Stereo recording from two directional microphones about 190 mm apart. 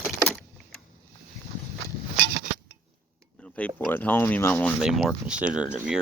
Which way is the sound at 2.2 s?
50° right (ahead or behind).